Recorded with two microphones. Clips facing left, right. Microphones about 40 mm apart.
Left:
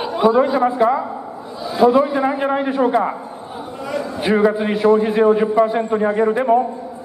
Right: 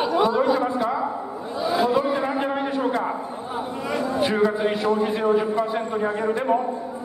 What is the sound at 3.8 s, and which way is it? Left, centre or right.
Speech, centre.